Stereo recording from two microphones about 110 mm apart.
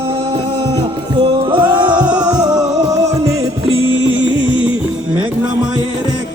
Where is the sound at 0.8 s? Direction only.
45° right (ahead or behind); by 3.1 s 30° right (ahead or behind).